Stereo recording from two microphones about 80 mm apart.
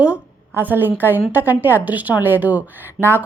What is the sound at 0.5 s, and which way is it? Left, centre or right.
A woman's voice, right.